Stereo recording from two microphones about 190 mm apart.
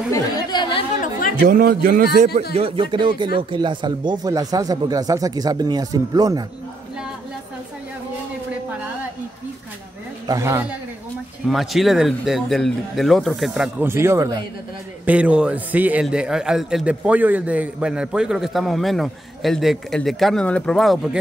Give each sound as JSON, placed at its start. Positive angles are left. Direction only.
{"t": 0.1, "sound": "chatter", "side_deg": 25}
{"t": 1.5, "sound": "a man's voice", "side_deg": -50}
{"t": 2.5, "sound": "speech", "side_deg": -30}
{"t": 10.2, "sound": "a man's voice", "side_deg": -15}